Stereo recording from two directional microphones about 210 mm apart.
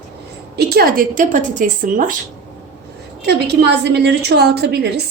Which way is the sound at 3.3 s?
50° right (ahead or behind).